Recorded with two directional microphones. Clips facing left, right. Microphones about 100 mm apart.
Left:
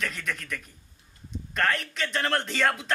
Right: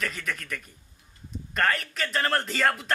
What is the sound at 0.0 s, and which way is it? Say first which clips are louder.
Speech: even; centre (ahead or behind).